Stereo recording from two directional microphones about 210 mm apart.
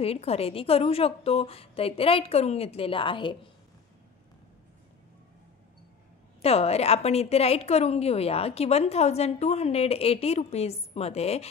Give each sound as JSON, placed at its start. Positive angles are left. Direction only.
{"t": 0.0, "sound": "a woman's voice", "side_deg": 30}
{"t": 6.4, "sound": "a woman's voice", "side_deg": 30}